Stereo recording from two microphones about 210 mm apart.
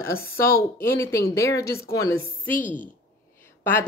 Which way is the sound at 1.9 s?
45° left (ahead or behind).